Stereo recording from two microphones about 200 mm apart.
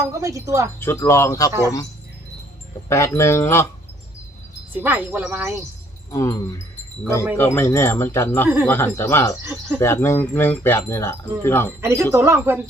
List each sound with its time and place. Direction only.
0.1 s speech: 15° right (ahead or behind)
0.8 s speech: 10° left (ahead or behind)
2.9 s speech: 15° left (ahead or behind)
4.7 s speech: 10° right (ahead or behind)
6.1 s speech: 15° left (ahead or behind)
11.8 s speech: 10° right (ahead or behind)